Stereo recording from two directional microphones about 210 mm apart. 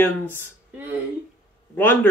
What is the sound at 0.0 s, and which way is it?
Speech, 10° left (ahead or behind).